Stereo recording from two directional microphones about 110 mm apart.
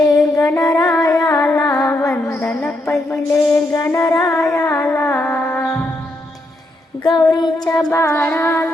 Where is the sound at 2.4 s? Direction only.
15° left (ahead or behind).